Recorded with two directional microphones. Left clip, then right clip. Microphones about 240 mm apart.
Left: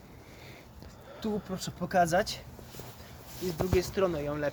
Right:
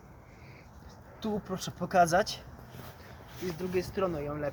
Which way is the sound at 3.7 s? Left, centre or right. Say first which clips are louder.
Left 3 dB; left.